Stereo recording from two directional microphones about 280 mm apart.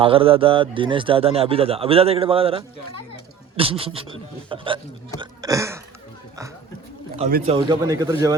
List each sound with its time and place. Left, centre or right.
0.0 s a man's voice: centre
7.2 s a man's voice: right
7.5 s speech: centre